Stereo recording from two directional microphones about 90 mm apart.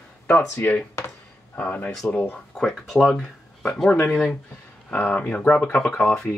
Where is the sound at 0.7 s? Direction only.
20° left (ahead or behind).